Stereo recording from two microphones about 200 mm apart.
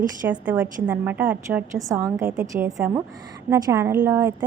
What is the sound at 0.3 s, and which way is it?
A woman's voice, 10° right (ahead or behind).